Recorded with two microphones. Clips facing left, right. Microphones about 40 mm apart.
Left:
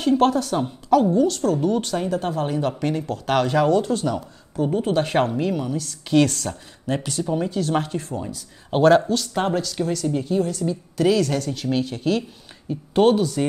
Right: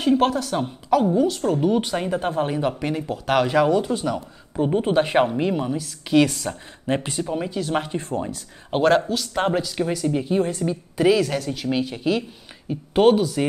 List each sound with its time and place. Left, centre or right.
0.2 s a woman's voice: centre
4.6 s speech: right
4.9 s a woman's voice: centre
5.4 s speech: right
5.8 s a woman's voice: centre
6.9 s a woman's voice: right
8.0 s speech: right
8.6 s a woman's voice: centre
10.3 s speech: right
10.7 s a woman's voice: centre